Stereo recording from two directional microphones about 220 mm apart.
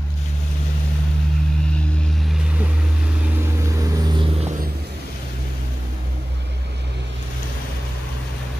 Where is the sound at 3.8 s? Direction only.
15° right (ahead or behind).